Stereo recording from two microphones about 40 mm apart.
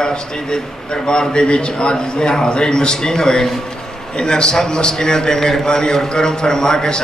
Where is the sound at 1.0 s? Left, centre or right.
Left.